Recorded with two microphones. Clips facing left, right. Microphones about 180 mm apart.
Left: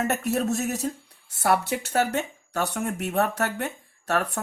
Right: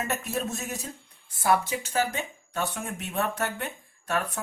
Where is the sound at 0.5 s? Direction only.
70° left (ahead or behind).